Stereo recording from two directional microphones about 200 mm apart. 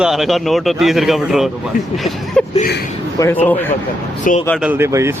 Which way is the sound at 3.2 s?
10° left (ahead or behind).